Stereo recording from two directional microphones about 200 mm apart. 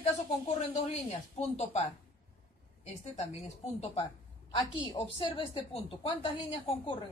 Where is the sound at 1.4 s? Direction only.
30° left (ahead or behind).